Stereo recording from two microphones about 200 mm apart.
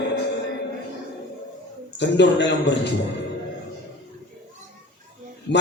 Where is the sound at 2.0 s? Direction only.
60° left (ahead or behind).